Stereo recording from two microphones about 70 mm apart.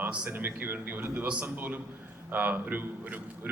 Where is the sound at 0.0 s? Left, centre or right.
Right.